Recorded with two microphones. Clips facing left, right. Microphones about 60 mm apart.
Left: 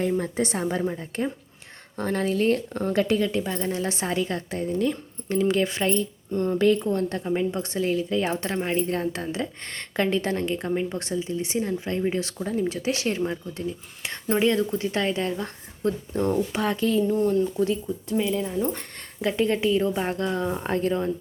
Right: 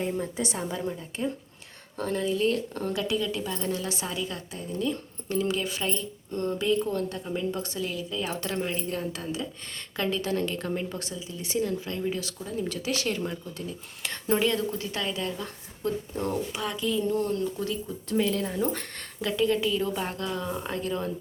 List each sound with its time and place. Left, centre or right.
0.3 s a woman's voice: left
6.3 s speech: left
6.9 s speech: left
10.4 s a woman's voice: left
12.6 s speech: left
17.3 s speech: left
18.1 s speech: centre
18.4 s speech: centre
19.2 s speech: left